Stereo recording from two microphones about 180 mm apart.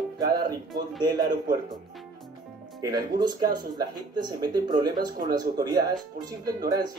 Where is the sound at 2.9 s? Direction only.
20° right (ahead or behind).